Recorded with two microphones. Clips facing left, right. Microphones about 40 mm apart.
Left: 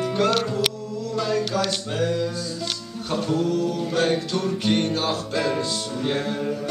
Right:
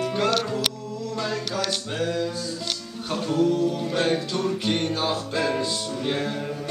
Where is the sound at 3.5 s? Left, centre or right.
Centre.